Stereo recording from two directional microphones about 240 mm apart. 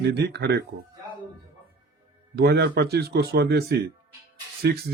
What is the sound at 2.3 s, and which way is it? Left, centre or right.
Speech, right.